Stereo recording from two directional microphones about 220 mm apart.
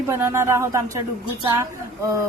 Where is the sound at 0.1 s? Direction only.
10° right (ahead or behind).